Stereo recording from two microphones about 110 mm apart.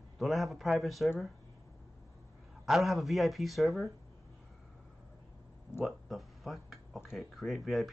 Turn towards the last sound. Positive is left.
turn(degrees=0)  # may be behind; listen again after turning